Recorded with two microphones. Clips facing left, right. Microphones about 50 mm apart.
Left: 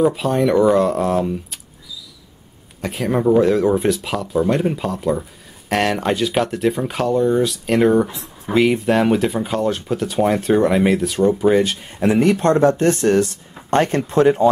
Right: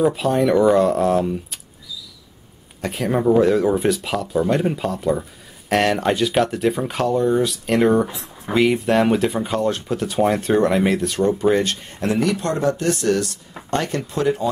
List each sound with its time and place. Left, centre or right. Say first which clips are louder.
0.0 s speech: left 1 dB; centre
2.8 s speech: left 1 dB; centre
12.2 s speech: left 8 dB; left